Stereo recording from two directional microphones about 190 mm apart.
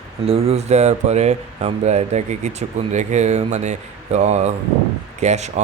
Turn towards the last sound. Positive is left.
turn(degrees=-35)  # may be behind; listen again after turning